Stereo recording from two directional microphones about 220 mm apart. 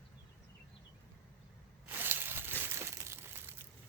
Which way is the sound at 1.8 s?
10° right (ahead or behind).